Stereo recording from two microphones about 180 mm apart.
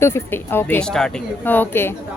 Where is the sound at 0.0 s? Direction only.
10° left (ahead or behind).